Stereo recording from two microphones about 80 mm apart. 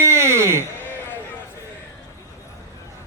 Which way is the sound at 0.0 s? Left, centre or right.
Right.